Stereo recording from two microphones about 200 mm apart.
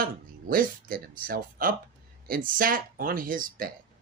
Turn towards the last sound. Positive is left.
turn(degrees=-45)  # may be behind; listen again after turning